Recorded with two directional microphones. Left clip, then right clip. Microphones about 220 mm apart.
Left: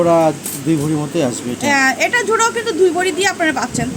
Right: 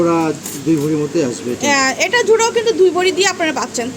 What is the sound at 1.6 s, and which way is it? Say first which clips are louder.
Speech: left 1 dB; 10° right (ahead or behind).